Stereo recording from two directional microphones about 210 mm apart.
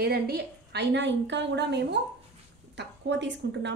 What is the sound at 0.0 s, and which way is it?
Speech, 50° right (ahead or behind).